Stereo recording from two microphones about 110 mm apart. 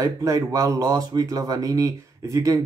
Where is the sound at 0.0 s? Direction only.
30° right (ahead or behind).